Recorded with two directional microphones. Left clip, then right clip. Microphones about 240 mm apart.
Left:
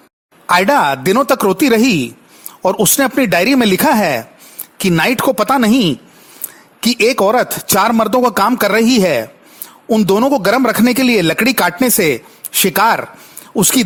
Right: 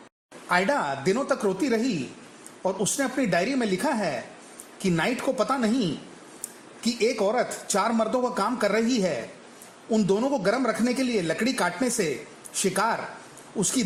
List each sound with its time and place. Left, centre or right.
0.4 s speech: left